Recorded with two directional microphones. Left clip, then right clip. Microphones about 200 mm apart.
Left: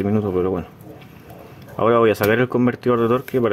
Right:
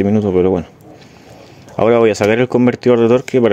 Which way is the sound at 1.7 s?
20° right (ahead or behind).